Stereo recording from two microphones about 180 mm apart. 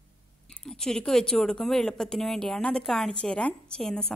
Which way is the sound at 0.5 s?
5° left (ahead or behind).